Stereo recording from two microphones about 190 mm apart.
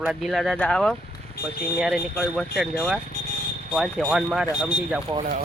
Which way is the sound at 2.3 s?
5° right (ahead or behind).